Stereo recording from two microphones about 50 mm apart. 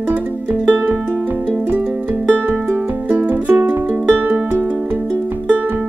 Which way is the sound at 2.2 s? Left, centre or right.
Right.